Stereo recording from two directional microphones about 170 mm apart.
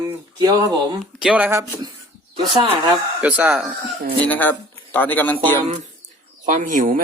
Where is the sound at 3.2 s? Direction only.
10° right (ahead or behind).